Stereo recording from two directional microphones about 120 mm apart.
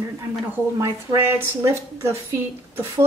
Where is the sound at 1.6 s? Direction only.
25° right (ahead or behind).